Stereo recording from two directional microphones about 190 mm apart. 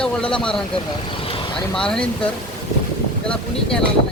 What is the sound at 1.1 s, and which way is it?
Vehicle, 30° left (ahead or behind).